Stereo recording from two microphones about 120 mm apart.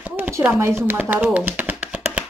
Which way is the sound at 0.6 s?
20° right (ahead or behind).